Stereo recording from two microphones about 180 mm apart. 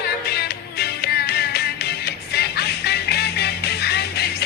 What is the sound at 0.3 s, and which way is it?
Music, 60° left (ahead or behind).